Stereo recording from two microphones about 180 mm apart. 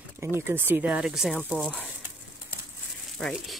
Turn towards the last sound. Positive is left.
turn(degrees=5)  # may be behind; listen again after turning